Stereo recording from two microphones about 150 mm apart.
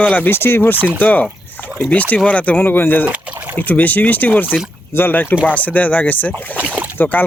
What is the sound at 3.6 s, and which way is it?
Speech, 10° left (ahead or behind).